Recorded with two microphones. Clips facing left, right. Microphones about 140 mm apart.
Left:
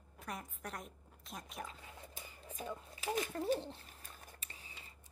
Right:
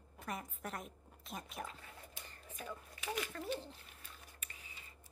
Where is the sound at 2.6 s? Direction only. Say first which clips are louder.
Left 3 dB; 25° left (ahead or behind).